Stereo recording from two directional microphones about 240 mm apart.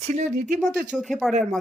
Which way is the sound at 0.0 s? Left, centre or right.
Right.